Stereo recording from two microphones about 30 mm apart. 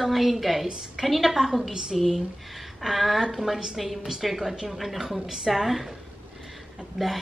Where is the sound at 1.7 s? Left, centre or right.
Centre.